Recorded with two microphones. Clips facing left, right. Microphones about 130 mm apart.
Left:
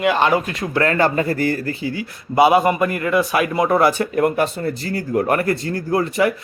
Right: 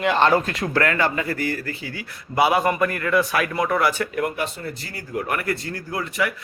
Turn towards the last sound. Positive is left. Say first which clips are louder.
# left 8 dB
turn(degrees=35)  # may be behind; listen again after turning